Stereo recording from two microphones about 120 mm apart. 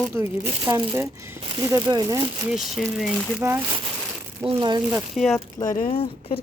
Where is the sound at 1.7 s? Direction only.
30° right (ahead or behind).